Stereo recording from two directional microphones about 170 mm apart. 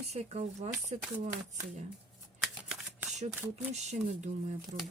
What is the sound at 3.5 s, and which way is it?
Speech, 40° right (ahead or behind).